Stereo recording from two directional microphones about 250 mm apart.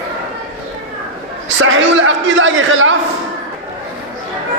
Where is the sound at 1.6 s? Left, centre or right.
Right.